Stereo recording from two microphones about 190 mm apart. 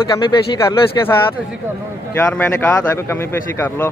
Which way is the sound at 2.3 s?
10° left (ahead or behind).